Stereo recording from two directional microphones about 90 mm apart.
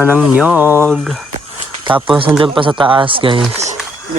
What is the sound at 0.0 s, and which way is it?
Speech, 15° right (ahead or behind).